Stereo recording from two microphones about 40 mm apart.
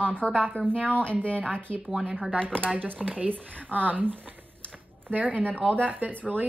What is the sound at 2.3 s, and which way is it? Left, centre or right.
Speech, left.